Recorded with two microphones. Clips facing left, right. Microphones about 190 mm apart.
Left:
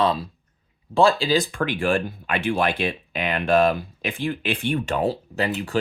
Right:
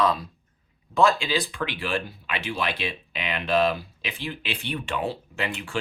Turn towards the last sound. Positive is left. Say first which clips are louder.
# left 6 dB
turn(degrees=40)  # may be behind; listen again after turning